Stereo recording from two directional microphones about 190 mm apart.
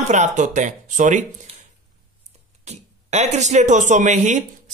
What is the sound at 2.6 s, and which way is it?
A man's voice, 35° right (ahead or behind).